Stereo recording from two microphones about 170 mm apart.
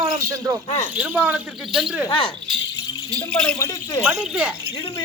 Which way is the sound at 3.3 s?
5° left (ahead or behind).